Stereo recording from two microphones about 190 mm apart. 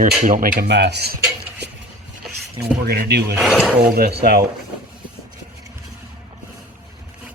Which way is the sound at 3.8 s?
50° right (ahead or behind).